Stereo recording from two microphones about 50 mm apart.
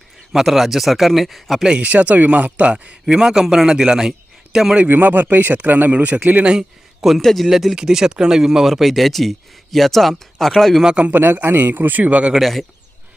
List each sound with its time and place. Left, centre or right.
0.3 s speech: centre
1.8 s speech: right
3.2 s speech: centre
4.9 s a man's voice: right
6.4 s speech: centre
7.2 s speech: centre
7.4 s speech: centre
10.8 s speech: right
11.1 s a man's voice: right
12.4 s speech: centre